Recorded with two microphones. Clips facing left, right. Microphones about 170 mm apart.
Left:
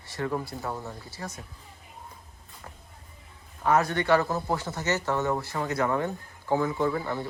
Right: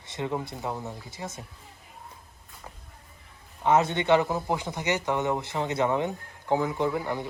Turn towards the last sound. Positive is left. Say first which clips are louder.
# even
turn(degrees=-15)  # may be behind; listen again after turning